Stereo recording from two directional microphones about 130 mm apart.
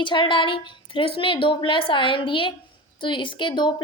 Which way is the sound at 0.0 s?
40° left (ahead or behind).